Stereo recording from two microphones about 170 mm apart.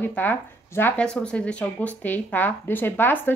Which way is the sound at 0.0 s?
10° left (ahead or behind).